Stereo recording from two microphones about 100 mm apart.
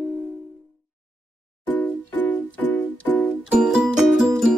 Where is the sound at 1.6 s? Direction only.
15° left (ahead or behind).